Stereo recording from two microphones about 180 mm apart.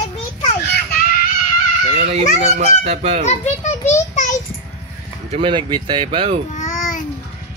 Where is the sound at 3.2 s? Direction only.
40° left (ahead or behind).